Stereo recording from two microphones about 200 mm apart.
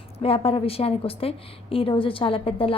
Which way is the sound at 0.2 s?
30° left (ahead or behind).